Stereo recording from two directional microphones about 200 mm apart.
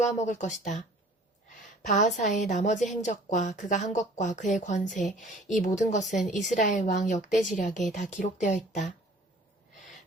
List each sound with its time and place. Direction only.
0.0 s a woman's voice: 35° left (ahead or behind)